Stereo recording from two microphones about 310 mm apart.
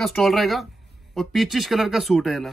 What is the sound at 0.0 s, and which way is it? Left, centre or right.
A man's voice, centre.